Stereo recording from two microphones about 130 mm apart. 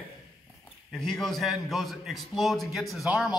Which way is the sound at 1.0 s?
Centre (ahead or behind).